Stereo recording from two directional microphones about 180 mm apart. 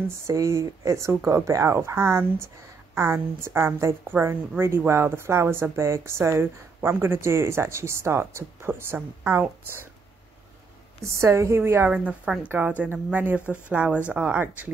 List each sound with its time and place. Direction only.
0.3 s a woman's voice: 15° right (ahead or behind)
11.1 s a woman's voice: 15° right (ahead or behind)